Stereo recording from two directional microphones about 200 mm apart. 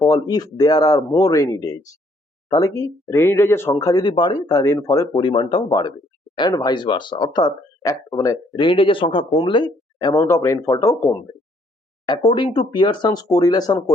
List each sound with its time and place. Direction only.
0.1 s speech: 20° left (ahead or behind)